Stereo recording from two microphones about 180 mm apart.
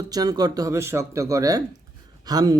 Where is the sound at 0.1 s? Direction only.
20° right (ahead or behind).